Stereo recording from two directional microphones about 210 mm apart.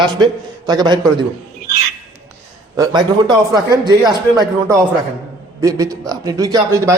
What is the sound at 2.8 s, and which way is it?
A man's voice, 20° right (ahead or behind).